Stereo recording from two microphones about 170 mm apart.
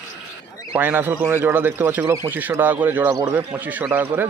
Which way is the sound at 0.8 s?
10° right (ahead or behind).